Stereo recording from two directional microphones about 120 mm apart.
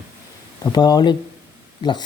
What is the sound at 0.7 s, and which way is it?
Speech, 35° left (ahead or behind).